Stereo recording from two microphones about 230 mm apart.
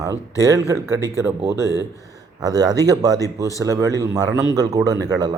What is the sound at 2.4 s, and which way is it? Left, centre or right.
Speech, centre.